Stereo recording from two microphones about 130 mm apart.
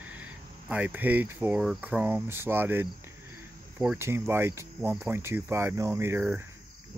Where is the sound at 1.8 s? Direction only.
15° right (ahead or behind).